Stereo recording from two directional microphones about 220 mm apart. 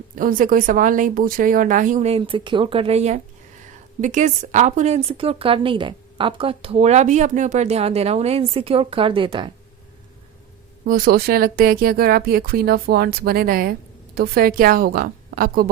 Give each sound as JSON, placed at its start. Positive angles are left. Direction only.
{"t": 0.2, "sound": "a woman's voice", "side_deg": -40}
{"t": 10.8, "sound": "a woman's voice", "side_deg": -40}